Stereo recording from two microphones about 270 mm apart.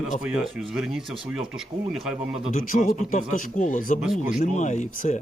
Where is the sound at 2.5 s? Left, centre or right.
Left.